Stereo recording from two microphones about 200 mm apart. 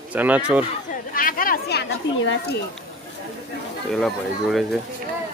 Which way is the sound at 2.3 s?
55° left (ahead or behind).